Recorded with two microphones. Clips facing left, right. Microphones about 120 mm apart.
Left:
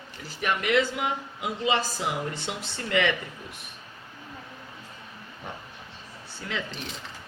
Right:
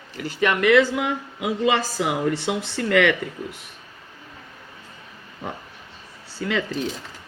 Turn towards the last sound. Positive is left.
turn(degrees=-90)